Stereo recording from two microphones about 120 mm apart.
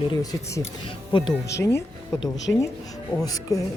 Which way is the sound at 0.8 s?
45° left (ahead or behind).